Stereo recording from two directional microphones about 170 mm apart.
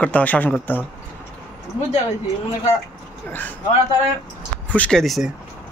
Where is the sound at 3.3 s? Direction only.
10° left (ahead or behind).